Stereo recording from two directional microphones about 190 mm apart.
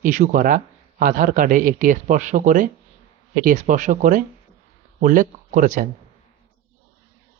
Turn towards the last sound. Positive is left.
turn(degrees=-45)  # may be behind; listen again after turning